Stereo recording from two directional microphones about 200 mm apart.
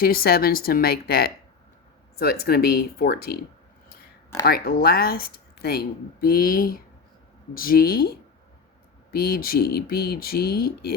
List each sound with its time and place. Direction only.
0.0 s speech: 50° left (ahead or behind)
4.4 s speech: 50° left (ahead or behind)
9.1 s speech: 50° left (ahead or behind)